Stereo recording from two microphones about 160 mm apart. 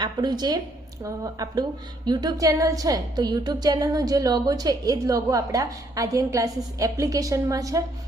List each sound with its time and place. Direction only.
0.0 s a woman's voice: 25° right (ahead or behind)